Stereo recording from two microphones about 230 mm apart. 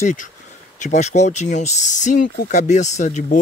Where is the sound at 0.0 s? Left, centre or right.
Left.